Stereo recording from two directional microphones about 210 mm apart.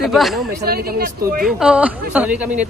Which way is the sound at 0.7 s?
45° right (ahead or behind).